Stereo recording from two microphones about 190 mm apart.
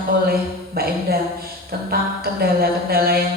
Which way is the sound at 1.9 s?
55° right (ahead or behind).